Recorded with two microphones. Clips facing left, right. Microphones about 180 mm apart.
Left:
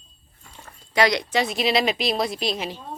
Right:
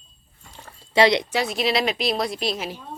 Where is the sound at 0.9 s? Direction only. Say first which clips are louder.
Right 3 dB; 25° right (ahead or behind).